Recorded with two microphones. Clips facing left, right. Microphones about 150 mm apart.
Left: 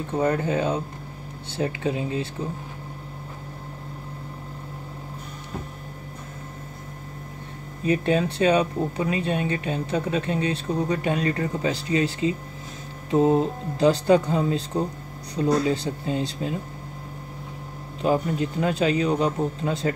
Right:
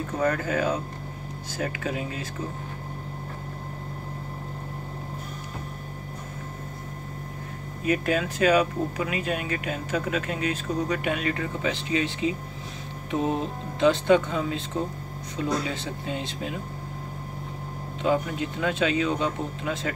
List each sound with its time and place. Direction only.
0.2 s speech: 25° left (ahead or behind)
7.8 s speech: 30° left (ahead or behind)
13.1 s speech: 30° left (ahead or behind)
18.0 s speech: 35° left (ahead or behind)